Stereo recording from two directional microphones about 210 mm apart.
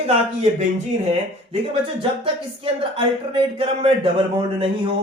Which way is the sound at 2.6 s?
25° right (ahead or behind).